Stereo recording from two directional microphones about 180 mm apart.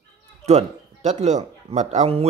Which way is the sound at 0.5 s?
40° right (ahead or behind).